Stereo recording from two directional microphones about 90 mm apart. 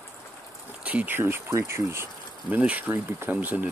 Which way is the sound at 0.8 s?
15° right (ahead or behind).